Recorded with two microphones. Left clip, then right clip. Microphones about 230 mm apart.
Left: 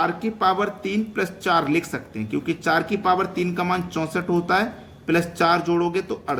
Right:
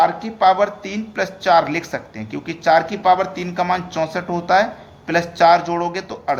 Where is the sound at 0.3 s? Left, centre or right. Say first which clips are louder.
Right 7 dB; centre.